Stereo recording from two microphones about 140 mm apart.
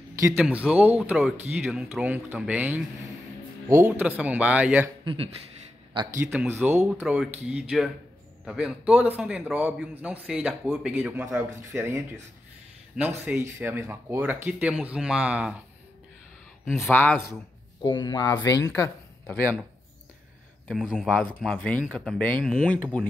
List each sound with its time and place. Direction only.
0.4 s speech: 10° right (ahead or behind)
3.6 s speech: 20° right (ahead or behind)
4.0 s speech: 10° right (ahead or behind)
5.0 s speech: 40° right (ahead or behind)
6.4 s speech: 15° right (ahead or behind)
16.6 s speech: centre (ahead or behind)
17.8 s speech: 30° left (ahead or behind)
18.3 s speech: 20° left (ahead or behind)
20.7 s speech: 5° right (ahead or behind)
21.4 s speech: 5° left (ahead or behind)